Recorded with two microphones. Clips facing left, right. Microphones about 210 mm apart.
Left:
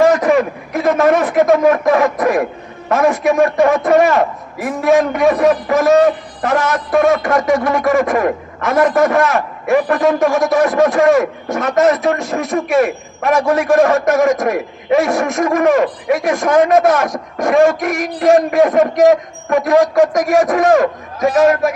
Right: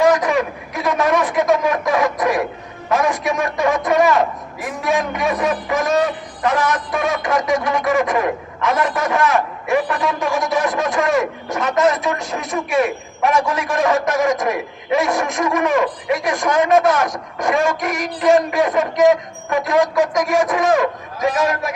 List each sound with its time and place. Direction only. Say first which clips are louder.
0.0 s a sound: left 4 dB; 50° left (ahead or behind)
2.9 s a man's voice: left 5 dB; 50° left (ahead or behind)
20.1 s a man's voice: left 4 dB; 55° left (ahead or behind)